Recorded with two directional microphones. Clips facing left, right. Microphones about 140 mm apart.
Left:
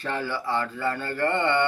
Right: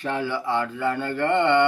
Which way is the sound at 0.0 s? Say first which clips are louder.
Right 3 dB; 15° right (ahead or behind).